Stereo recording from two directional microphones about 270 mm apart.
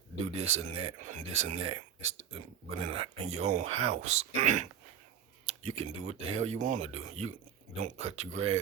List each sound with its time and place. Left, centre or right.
0.3 s speech: right